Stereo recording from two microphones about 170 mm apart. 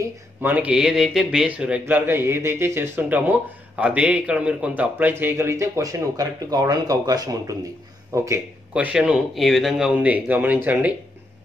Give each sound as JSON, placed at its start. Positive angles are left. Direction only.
{"t": 0.0, "sound": "speech", "side_deg": -10}